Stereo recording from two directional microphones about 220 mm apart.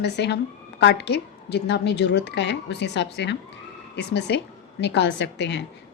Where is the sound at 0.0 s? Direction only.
50° left (ahead or behind).